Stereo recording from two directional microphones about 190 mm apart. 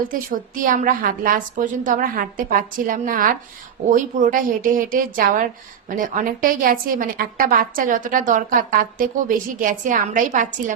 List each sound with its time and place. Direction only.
0.1 s a woman's voice: 45° right (ahead or behind)